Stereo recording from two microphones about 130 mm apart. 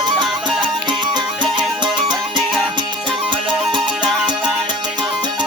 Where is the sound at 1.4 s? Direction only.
35° right (ahead or behind).